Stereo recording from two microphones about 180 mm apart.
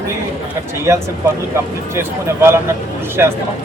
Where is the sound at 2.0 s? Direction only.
15° right (ahead or behind).